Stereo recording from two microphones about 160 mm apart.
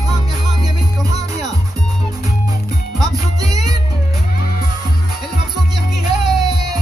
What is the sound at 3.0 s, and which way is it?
Music, 25° right (ahead or behind).